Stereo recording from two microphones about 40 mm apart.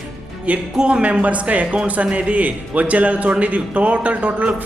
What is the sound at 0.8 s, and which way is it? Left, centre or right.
Speech, right.